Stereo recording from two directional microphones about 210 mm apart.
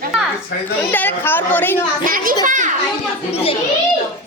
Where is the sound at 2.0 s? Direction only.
40° right (ahead or behind).